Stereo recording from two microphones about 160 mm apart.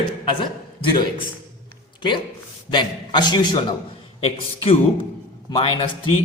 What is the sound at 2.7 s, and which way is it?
Speech, 30° left (ahead or behind).